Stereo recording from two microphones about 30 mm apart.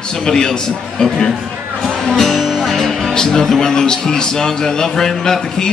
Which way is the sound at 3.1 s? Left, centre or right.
Left.